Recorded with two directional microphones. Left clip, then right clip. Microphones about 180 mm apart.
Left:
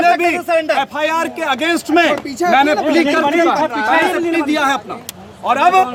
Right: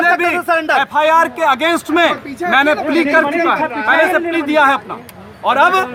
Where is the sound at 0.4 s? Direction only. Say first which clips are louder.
Right 1 dB; 40° right (ahead or behind).